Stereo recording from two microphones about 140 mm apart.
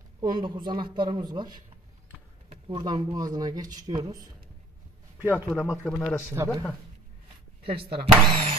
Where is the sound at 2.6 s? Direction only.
30° right (ahead or behind).